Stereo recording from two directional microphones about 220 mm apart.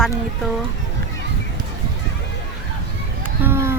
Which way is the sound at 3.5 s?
10° right (ahead or behind).